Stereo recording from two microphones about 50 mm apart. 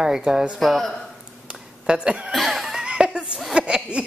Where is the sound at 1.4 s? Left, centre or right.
Centre.